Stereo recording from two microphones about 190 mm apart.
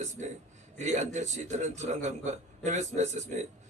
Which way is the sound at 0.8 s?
40° right (ahead or behind).